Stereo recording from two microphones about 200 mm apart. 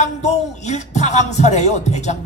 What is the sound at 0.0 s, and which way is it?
A man's voice, 35° left (ahead or behind).